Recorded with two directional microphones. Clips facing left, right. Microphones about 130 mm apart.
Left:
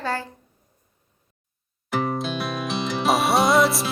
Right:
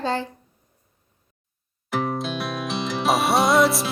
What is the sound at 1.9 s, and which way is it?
Music, centre (ahead or behind).